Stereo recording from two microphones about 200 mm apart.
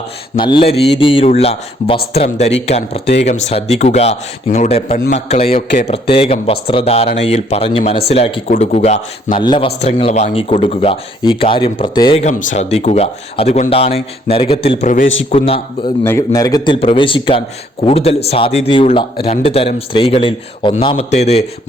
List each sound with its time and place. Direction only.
0.3 s speech: 25° left (ahead or behind)
4.9 s a man's voice: 45° left (ahead or behind)
5.3 s speech: 30° left (ahead or behind)
12.2 s speech: 40° left (ahead or behind)
15.0 s a man's voice: 70° left (ahead or behind)
15.3 s speech: 30° left (ahead or behind)
16.0 s speech: 15° left (ahead or behind); by 21.4 s 35° left (ahead or behind)